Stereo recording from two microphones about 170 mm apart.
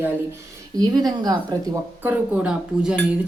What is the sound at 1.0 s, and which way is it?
Speech, 25° right (ahead or behind).